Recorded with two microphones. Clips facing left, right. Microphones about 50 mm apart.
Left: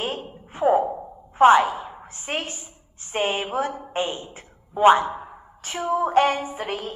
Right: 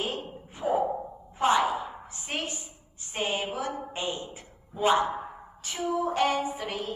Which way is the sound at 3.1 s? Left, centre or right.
Left.